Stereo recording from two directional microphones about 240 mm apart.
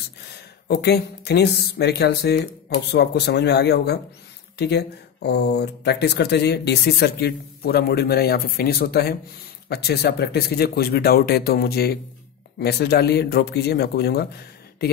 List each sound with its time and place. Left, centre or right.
0.7 s speech: left